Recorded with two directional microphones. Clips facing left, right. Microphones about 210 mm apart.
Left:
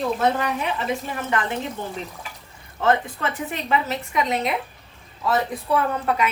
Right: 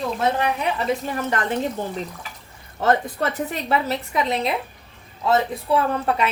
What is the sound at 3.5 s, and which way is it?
A woman's voice, 35° right (ahead or behind).